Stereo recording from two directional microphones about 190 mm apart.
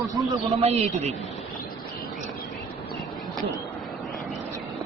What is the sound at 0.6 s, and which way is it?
Speech, 35° right (ahead or behind).